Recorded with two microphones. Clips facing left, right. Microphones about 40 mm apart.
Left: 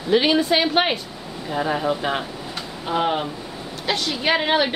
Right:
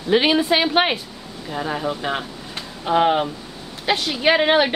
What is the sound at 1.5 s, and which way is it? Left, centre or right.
Speech, centre.